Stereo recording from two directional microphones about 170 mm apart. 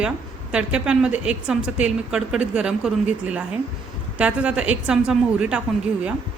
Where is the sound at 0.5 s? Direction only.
5° right (ahead or behind).